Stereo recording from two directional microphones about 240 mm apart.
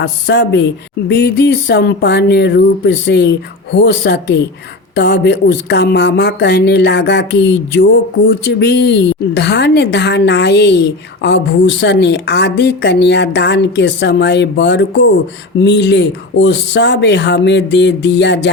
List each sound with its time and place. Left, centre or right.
0.0 s a woman's voice: left